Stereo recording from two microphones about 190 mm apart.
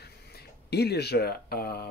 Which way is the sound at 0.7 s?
60° left (ahead or behind).